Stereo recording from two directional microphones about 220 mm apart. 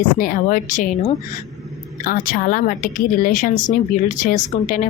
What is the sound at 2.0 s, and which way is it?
A woman's voice, 40° left (ahead or behind).